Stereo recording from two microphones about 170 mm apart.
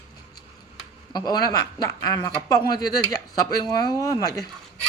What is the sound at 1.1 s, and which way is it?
Speech, 25° left (ahead or behind).